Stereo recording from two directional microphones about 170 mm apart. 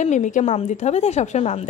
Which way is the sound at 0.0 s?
45° left (ahead or behind).